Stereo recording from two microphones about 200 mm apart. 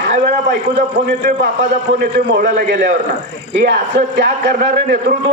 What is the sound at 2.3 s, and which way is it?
Speech, 45° right (ahead or behind).